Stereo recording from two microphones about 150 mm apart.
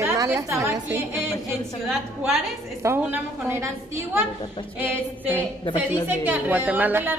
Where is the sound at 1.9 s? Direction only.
5° right (ahead or behind).